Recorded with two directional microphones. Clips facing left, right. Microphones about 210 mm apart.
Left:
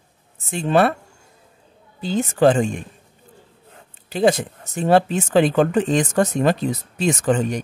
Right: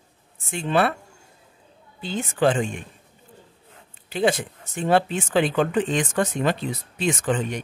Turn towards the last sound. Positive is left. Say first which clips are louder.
# left 5 dB
turn(degrees=45)  # may be behind; listen again after turning